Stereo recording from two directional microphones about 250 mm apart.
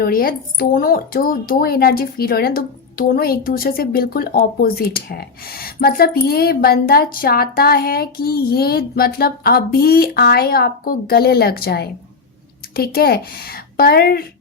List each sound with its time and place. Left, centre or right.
0.0 s speech: left